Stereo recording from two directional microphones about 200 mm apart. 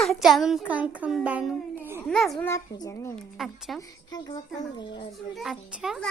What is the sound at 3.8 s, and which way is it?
Speech, 20° left (ahead or behind).